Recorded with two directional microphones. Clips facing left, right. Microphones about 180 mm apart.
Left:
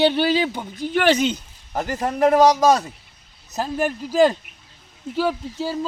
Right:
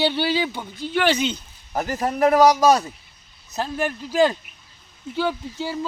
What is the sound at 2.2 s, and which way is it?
Speech, 15° left (ahead or behind).